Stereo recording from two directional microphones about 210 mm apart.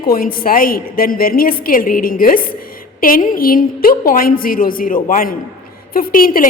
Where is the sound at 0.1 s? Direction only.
45° left (ahead or behind).